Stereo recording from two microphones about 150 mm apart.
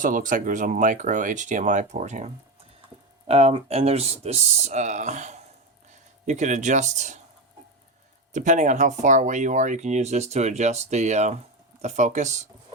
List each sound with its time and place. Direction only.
0.0 s speech: 60° right (ahead or behind)
3.2 s speech: 45° right (ahead or behind)
8.3 s speech: 55° right (ahead or behind)